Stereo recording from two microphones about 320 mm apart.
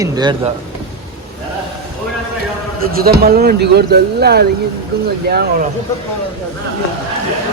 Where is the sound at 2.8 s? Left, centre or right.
Right.